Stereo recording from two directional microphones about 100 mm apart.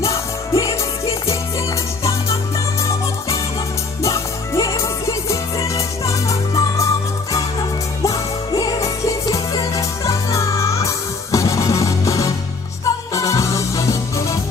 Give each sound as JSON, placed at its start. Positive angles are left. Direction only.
{"t": 0.0, "sound": "music", "side_deg": 30}
{"t": 4.0, "sound": "music", "side_deg": 30}
{"t": 8.0, "sound": "music", "side_deg": 35}